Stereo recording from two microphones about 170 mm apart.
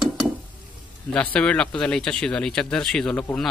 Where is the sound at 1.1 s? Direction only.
5° left (ahead or behind).